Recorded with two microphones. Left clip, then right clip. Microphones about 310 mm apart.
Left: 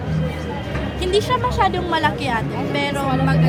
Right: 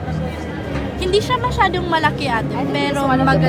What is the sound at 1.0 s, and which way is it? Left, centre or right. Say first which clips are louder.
Speech: right 1 dB; centre.